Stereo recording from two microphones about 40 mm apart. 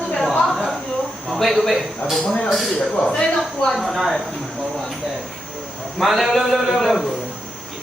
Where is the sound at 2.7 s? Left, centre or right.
Left.